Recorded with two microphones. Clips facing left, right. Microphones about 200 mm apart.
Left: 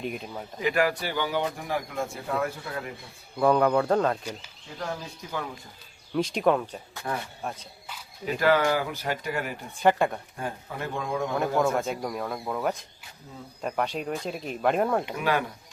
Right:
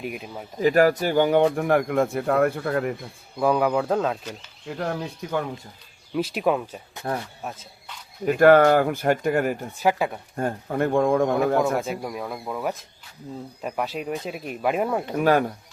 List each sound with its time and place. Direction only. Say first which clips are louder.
0.0 s speech: right 1 dB; 5° right (ahead or behind)
0.6 s speech: right 7 dB; 40° right (ahead or behind); by 2.9 s 60° right (ahead or behind)
3.3 s speech: even; 5° right (ahead or behind)
5.2 s speech: right 9 dB; 60° right (ahead or behind)
6.1 s speech: even; 5° right (ahead or behind)
7.1 s speech: right 4 dB; 40° right (ahead or behind)
7.4 s speech: even; 5° right (ahead or behind)
8.2 s speech: right 8 dB; 50° right (ahead or behind)
9.8 s speech: even; 5° right (ahead or behind)
10.3 s speech: right 9 dB; 45° right (ahead or behind)
11.6 s speech: right 1 dB; 5° right (ahead or behind)
15.1 s speech: right 7 dB; 45° right (ahead or behind)